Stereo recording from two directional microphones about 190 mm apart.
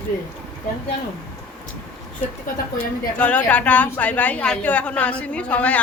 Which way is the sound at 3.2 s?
5° left (ahead or behind).